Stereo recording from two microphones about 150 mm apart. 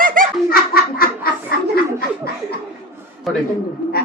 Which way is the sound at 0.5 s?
80° left.